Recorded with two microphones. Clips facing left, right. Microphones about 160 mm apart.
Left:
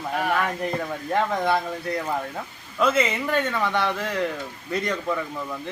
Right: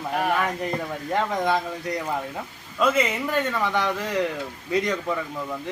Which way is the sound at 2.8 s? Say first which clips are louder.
Even; 10° right (ahead or behind).